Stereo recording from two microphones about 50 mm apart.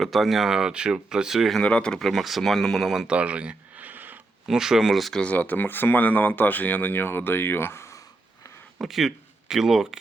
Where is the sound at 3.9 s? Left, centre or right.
Right.